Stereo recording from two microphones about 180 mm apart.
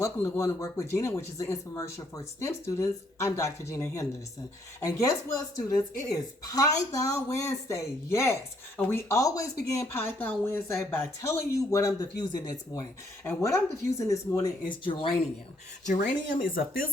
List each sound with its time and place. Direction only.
0.0 s speech: 15° left (ahead or behind)
16.4 s speech: 55° left (ahead or behind)